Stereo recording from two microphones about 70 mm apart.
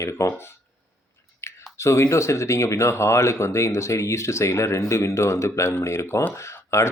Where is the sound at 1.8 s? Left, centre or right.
Left.